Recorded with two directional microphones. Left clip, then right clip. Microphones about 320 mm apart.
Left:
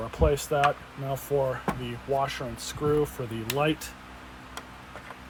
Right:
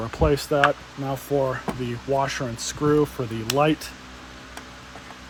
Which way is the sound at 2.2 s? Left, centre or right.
Right.